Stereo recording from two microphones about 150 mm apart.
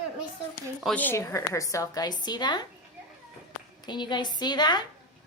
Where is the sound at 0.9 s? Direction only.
15° left (ahead or behind).